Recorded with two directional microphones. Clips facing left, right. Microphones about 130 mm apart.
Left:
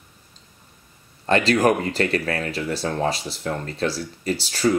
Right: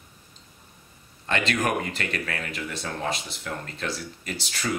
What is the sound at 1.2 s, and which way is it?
Speech, 35° left (ahead or behind).